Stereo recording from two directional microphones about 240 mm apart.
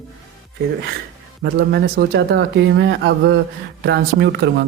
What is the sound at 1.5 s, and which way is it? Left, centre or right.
Speech, right.